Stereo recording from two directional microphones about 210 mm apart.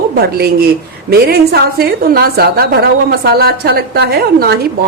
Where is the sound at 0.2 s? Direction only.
50° right (ahead or behind).